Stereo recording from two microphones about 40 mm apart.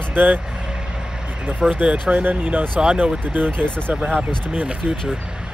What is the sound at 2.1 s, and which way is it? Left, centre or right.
Speech, right.